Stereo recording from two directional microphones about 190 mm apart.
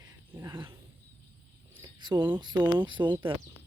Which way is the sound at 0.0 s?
15° right (ahead or behind).